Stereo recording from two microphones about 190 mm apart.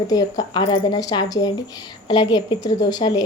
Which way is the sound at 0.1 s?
20° left (ahead or behind).